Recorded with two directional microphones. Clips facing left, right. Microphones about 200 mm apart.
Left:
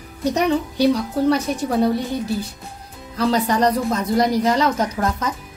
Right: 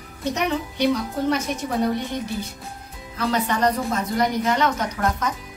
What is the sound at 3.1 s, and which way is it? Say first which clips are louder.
A child's voice: left 5 dB; 35° left (ahead or behind).